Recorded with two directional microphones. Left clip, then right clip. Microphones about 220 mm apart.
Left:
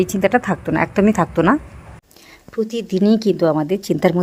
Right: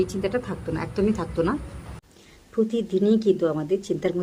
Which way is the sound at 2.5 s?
40° left (ahead or behind).